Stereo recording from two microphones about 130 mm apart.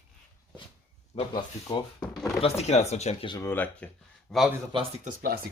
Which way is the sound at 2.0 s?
5° left (ahead or behind).